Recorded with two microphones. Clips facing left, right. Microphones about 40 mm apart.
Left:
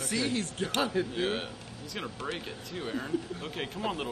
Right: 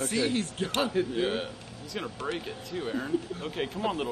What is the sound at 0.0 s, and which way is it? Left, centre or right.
Speech, right.